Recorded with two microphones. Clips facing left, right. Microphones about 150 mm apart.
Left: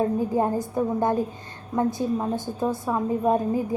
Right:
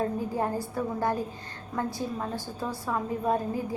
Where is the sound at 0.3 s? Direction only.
20° left (ahead or behind).